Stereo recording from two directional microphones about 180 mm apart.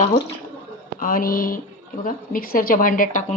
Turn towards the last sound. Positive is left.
turn(degrees=45)  # may be behind; listen again after turning